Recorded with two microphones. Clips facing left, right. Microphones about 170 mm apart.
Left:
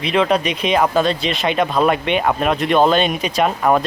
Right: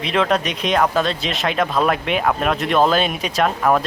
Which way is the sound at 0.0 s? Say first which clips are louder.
Left 2 dB; centre (ahead or behind).